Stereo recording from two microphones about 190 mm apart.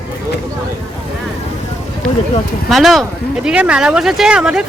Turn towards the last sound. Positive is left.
turn(degrees=-5)  # may be behind; listen again after turning